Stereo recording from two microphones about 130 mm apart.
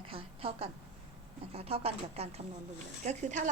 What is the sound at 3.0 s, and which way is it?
Speech, 65° right (ahead or behind).